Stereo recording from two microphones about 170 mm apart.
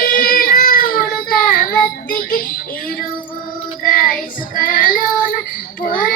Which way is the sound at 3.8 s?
55° left (ahead or behind).